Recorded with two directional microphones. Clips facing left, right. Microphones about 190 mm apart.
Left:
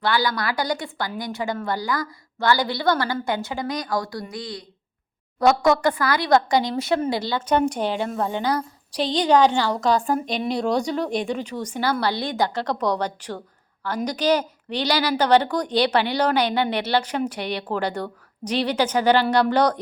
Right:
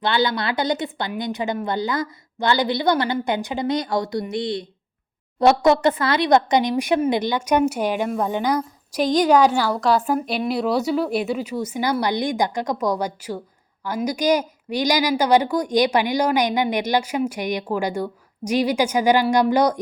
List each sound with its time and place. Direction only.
0.0 s speech: 20° right (ahead or behind)